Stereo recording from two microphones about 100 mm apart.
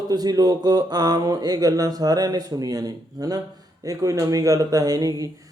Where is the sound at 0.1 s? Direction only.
40° right (ahead or behind).